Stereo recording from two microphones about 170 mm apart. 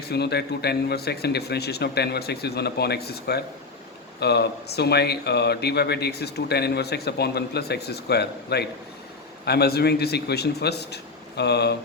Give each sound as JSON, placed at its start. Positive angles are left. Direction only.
{"t": 0.0, "sound": "speech", "side_deg": 70}